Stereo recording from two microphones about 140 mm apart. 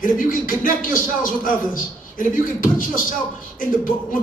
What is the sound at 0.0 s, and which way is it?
Speech, 75° left (ahead or behind).